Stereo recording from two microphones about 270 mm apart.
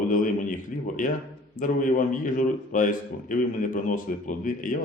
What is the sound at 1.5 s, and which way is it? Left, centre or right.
A man's voice, left.